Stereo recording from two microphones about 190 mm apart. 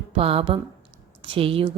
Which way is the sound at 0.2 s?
30° right (ahead or behind).